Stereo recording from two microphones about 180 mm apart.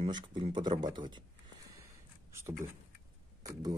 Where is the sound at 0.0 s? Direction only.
25° right (ahead or behind).